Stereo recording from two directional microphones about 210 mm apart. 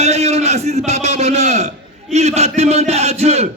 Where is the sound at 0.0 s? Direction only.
30° right (ahead or behind).